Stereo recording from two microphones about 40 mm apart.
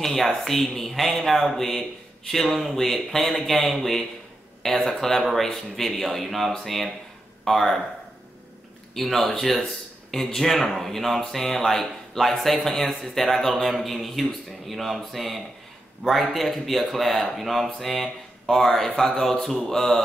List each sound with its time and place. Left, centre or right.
0.0 s speech: centre
8.9 s speech: centre